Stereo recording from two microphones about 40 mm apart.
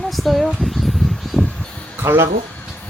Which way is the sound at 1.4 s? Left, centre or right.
Left.